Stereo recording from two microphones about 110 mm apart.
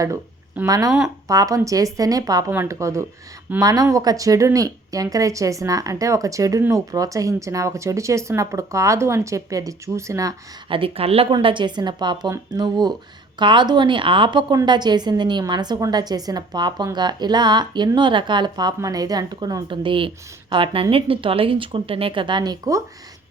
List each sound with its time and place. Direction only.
0.7 s a woman's voice: 30° right (ahead or behind)
10.7 s a woman's voice: 55° right (ahead or behind)
11.3 s a woman's voice: 45° right (ahead or behind)
19.7 s a woman's voice: 50° right (ahead or behind)